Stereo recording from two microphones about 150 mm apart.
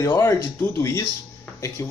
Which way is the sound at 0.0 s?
20° left (ahead or behind).